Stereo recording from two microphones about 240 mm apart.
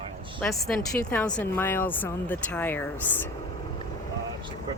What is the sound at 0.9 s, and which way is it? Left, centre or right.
Speech, centre.